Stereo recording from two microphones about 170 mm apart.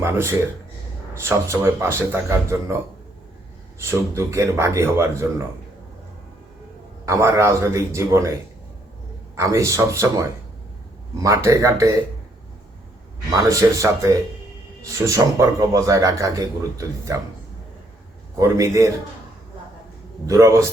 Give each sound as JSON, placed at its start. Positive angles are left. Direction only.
{"t": 0.0, "sound": "speech", "side_deg": -15}
{"t": 3.8, "sound": "speech", "side_deg": -15}
{"t": 7.0, "sound": "speech", "side_deg": -15}
{"t": 9.3, "sound": "speech", "side_deg": -15}
{"t": 13.5, "sound": "speech", "side_deg": -20}
{"t": 18.3, "sound": "speech", "side_deg": -20}
{"t": 20.2, "sound": "speech", "side_deg": -20}